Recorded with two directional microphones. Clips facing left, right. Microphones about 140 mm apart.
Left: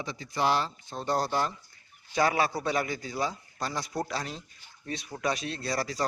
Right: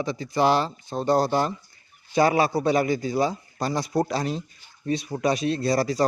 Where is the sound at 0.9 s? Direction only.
25° right (ahead or behind).